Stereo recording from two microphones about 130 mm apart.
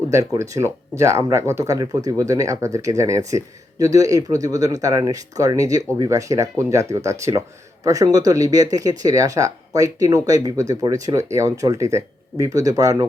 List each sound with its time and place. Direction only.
0.3 s speech: 20° right (ahead or behind)